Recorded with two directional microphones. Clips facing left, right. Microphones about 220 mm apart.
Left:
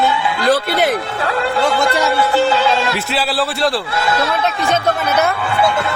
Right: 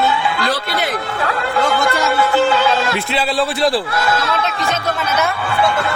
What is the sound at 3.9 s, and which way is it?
Speech, 25° left (ahead or behind).